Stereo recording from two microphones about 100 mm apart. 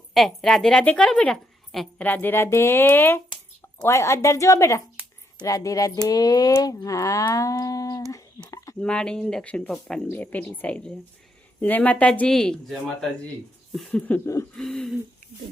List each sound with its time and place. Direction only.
0.1 s speech: centre (ahead or behind)
2.0 s speech: 15° left (ahead or behind)
3.8 s music: 30° left (ahead or behind)
8.8 s speech: 10° left (ahead or behind)
10.1 s speech: 20° left (ahead or behind)